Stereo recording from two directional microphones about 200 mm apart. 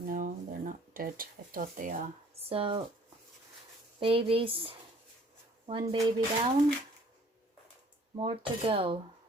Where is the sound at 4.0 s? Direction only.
25° right (ahead or behind).